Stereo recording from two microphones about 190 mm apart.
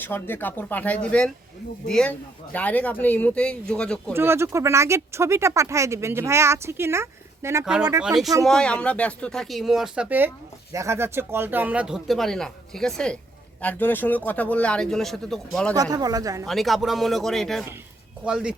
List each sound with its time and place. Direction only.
0.0 s speech: 10° left (ahead or behind)
4.1 s speech: 10° right (ahead or behind)
7.6 s speech: 5° right (ahead or behind)
15.7 s speech: 20° right (ahead or behind)
16.5 s speech: centre (ahead or behind)